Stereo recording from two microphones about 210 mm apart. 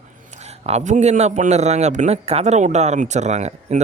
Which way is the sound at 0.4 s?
30° right (ahead or behind).